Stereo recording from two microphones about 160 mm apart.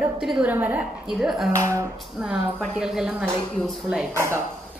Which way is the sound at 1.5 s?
20° right (ahead or behind).